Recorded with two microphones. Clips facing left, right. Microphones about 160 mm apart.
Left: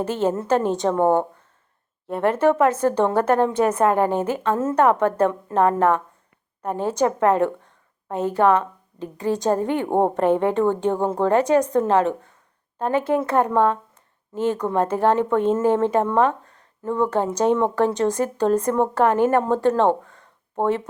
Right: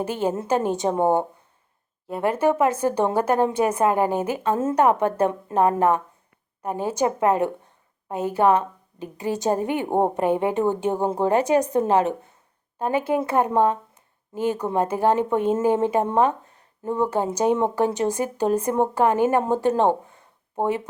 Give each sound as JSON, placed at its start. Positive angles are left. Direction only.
{"t": 0.0, "sound": "a woman's voice", "side_deg": -15}
{"t": 0.9, "sound": "a woman's voice", "side_deg": -15}
{"t": 2.0, "sound": "a woman's voice", "side_deg": -5}
{"t": 20.0, "sound": "a sound", "side_deg": -15}